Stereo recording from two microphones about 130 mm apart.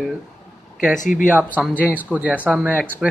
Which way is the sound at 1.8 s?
10° right (ahead or behind).